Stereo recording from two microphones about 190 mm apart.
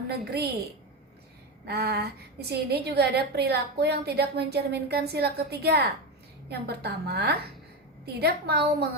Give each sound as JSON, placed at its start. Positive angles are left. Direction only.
{"t": 0.1, "sound": "a woman's voice", "side_deg": -60}
{"t": 1.6, "sound": "a woman's voice", "side_deg": -55}